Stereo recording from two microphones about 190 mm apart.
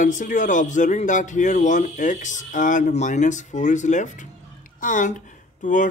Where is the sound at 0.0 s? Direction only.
40° left (ahead or behind).